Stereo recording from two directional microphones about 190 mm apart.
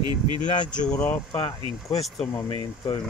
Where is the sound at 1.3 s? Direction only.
25° left (ahead or behind).